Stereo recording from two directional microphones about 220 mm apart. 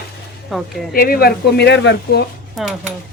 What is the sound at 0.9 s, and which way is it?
A woman's voice, 40° left (ahead or behind).